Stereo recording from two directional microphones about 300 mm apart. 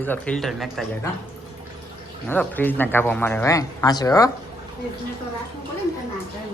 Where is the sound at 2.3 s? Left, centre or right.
Centre.